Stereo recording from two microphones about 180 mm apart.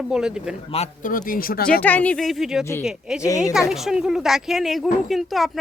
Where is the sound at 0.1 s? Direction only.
5° right (ahead or behind).